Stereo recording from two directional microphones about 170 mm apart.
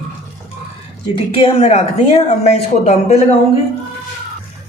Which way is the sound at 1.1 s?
35° left (ahead or behind).